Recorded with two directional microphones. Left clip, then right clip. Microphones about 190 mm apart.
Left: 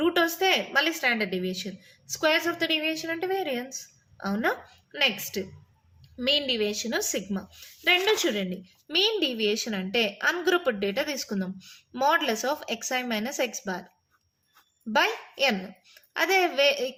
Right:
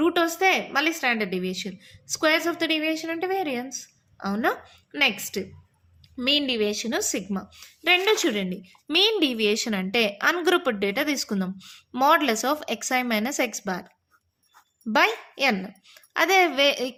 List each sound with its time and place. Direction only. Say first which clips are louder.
0.0 s a woman's voice: right 2 dB; 25° right (ahead or behind)
14.9 s a woman's voice: right 3 dB; 35° right (ahead or behind)